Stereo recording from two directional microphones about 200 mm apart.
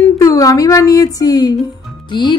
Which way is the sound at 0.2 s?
15° left (ahead or behind).